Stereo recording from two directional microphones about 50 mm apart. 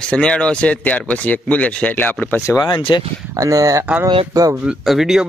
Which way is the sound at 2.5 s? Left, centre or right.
Left.